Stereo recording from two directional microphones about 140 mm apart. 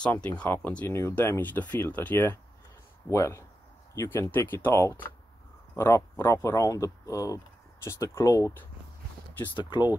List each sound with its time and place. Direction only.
0.0 s speech: 10° left (ahead or behind)
9.5 s speech: 35° left (ahead or behind)